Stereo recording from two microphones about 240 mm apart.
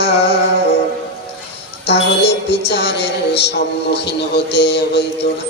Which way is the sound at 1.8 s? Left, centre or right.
Left.